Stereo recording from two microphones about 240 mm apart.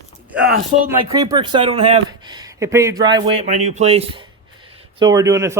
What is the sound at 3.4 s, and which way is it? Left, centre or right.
Speech, right.